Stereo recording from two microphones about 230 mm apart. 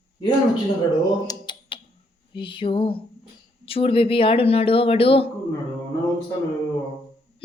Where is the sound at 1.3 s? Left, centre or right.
Centre.